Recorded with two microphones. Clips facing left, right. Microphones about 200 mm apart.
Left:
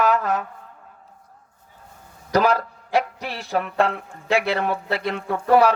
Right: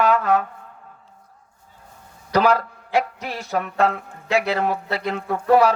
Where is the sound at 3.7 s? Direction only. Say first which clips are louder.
Right 1 dB; 35° left (ahead or behind).